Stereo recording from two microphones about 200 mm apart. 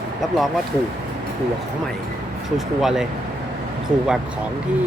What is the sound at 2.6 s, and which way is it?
Speech, centre (ahead or behind).